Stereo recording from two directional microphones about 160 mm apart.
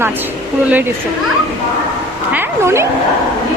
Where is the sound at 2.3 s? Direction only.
15° right (ahead or behind).